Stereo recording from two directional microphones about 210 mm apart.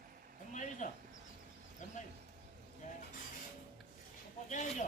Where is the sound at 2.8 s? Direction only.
35° left (ahead or behind).